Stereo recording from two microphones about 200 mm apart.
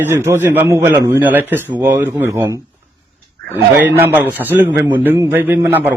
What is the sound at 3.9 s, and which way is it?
A man's voice, 10° right (ahead or behind).